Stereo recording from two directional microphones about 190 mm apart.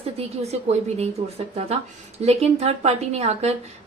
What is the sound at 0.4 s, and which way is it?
Speech, 35° right (ahead or behind).